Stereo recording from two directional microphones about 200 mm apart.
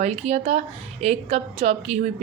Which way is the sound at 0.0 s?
35° right (ahead or behind).